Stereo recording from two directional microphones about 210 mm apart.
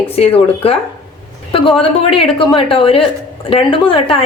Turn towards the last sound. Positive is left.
turn(degrees=25)  # may be behind; listen again after turning